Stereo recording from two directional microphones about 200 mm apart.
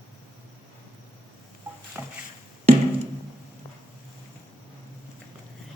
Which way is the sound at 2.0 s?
10° right (ahead or behind).